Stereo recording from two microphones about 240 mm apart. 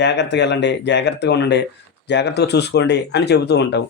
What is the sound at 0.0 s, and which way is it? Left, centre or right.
Speech, left.